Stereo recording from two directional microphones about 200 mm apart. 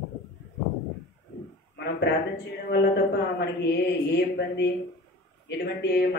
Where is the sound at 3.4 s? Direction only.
55° left (ahead or behind).